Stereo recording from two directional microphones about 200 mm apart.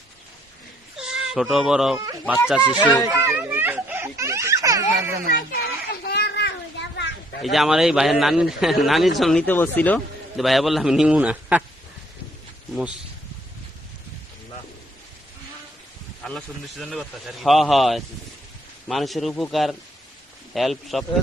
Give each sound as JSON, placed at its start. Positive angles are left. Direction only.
{"t": 0.9, "sound": "speech", "side_deg": -5}
{"t": 2.6, "sound": "speech", "side_deg": 20}
{"t": 3.1, "sound": "a sound", "side_deg": -10}
{"t": 5.9, "sound": "children playing", "side_deg": 55}
{"t": 7.4, "sound": "a man's voice", "side_deg": 0}
{"t": 16.2, "sound": "a man's voice", "side_deg": 5}